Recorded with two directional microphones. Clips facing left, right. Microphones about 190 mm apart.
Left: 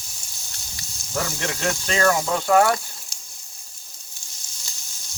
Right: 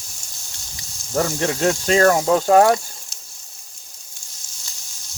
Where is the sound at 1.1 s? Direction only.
40° right (ahead or behind).